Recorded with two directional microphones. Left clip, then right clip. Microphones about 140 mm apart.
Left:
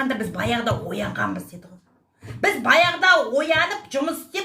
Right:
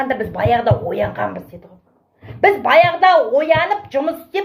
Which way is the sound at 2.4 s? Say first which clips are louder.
Right 6 dB; 30° left (ahead or behind).